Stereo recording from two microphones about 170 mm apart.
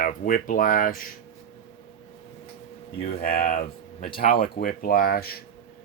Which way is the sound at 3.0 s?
60° left (ahead or behind).